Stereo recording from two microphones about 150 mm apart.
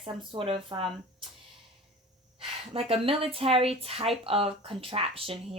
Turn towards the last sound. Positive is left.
turn(degrees=-40)  # may be behind; listen again after turning